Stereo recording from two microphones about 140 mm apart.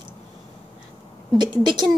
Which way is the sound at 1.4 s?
30° right (ahead or behind).